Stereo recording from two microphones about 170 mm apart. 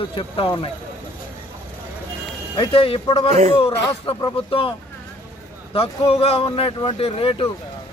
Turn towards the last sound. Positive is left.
turn(degrees=35)  # may be behind; listen again after turning